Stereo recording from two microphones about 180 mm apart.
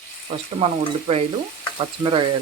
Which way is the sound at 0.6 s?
35° right (ahead or behind).